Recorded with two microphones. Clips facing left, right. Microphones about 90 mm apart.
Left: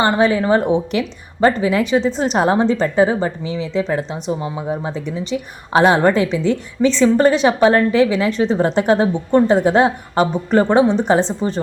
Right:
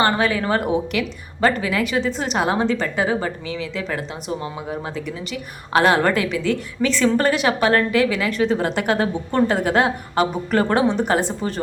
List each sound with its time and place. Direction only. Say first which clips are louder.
0.0 s a woman's voice: left 4 dB; 25° left (ahead or behind)